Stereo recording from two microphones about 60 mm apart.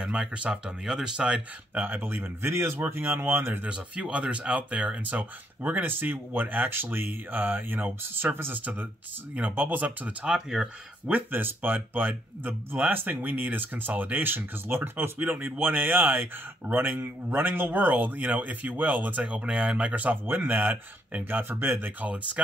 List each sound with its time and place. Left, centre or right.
0.0 s speech: centre
1.8 s speech: right
2.5 s speech: right
3.6 s speech: right
10.2 s speech: centre
11.1 s speech: right
22.0 s speech: right